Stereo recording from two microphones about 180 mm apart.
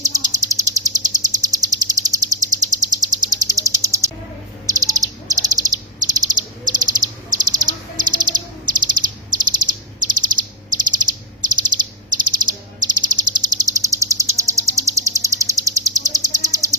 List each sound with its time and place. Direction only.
0.0 s bird: 20° right (ahead or behind)
1.5 s a sound: 20° right (ahead or behind)
3.3 s bird: 20° right (ahead or behind)